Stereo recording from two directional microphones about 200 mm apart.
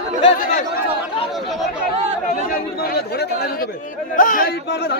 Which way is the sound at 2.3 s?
50° left (ahead or behind).